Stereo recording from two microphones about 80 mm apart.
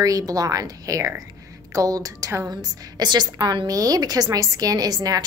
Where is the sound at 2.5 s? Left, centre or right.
Right.